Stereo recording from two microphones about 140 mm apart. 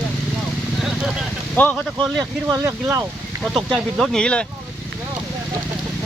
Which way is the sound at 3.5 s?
Centre (ahead or behind).